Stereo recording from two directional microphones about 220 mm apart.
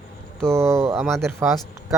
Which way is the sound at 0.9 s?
Centre (ahead or behind).